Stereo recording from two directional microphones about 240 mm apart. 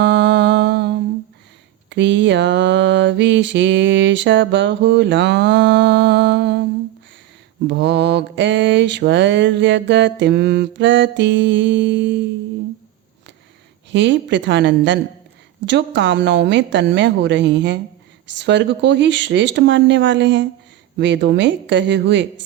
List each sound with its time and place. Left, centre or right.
0.0 s mantra: right
7.7 s mantra: right
13.9 s mantra: right